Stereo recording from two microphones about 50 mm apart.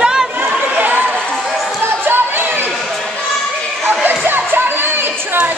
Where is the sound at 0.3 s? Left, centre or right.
Right.